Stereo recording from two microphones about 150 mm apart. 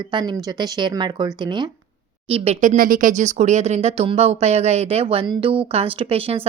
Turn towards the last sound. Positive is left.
turn(degrees=-40)  # may be behind; listen again after turning